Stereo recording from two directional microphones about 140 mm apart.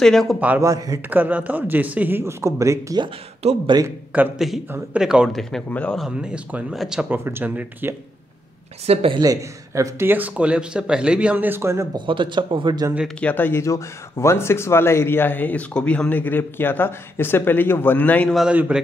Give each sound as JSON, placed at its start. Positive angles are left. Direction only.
{"t": 0.0, "sound": "speech", "side_deg": 5}
{"t": 0.6, "sound": "speech", "side_deg": -25}
{"t": 1.1, "sound": "speech", "side_deg": -10}
{"t": 4.1, "sound": "speech", "side_deg": -5}
{"t": 6.0, "sound": "speech", "side_deg": -5}
{"t": 8.8, "sound": "speech", "side_deg": -45}
{"t": 9.2, "sound": "speech", "side_deg": -25}
{"t": 12.1, "sound": "speech", "side_deg": -35}
{"t": 13.2, "sound": "speech", "side_deg": 10}
{"t": 18.3, "sound": "speech", "side_deg": -5}